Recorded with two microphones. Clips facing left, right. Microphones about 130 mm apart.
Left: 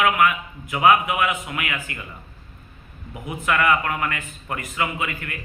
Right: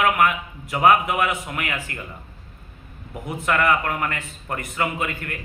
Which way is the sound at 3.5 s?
40° right (ahead or behind).